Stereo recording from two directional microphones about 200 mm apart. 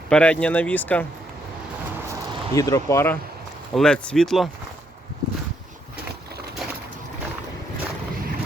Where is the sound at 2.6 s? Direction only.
15° left (ahead or behind).